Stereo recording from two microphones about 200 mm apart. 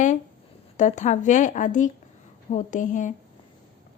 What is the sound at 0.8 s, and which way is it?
A woman's voice, 35° left (ahead or behind).